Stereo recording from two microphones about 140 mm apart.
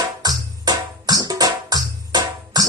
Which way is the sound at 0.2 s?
30° right (ahead or behind).